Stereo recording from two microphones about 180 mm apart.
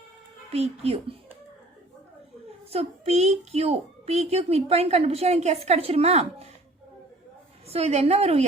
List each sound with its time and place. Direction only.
0.5 s a child's voice: 35° right (ahead or behind)
2.6 s a child's voice: 35° right (ahead or behind)
7.7 s a child's voice: 35° right (ahead or behind)